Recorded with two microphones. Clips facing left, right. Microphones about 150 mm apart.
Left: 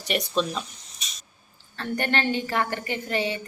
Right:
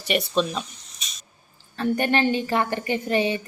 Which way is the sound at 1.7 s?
15° right (ahead or behind).